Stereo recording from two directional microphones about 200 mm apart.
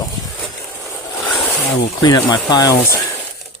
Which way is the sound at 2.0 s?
20° left (ahead or behind).